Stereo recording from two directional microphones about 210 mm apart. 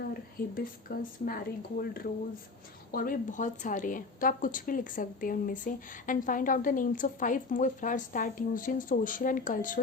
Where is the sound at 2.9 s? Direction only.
40° left (ahead or behind).